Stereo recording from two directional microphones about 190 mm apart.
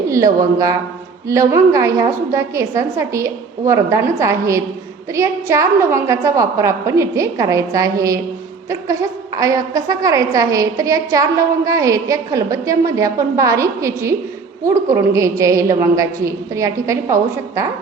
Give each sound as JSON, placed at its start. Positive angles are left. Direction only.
{"t": 0.3, "sound": "a woman's voice", "side_deg": -15}